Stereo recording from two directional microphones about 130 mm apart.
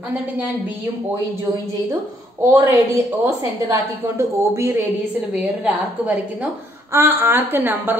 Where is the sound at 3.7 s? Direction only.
20° right (ahead or behind).